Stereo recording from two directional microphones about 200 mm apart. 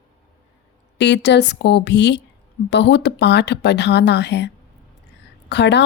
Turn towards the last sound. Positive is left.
turn(degrees=60)  # may be behind; listen again after turning